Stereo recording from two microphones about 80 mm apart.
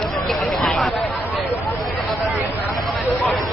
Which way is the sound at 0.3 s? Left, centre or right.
Centre.